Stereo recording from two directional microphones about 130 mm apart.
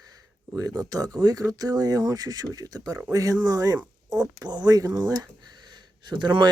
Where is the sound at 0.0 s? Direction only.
30° right (ahead or behind).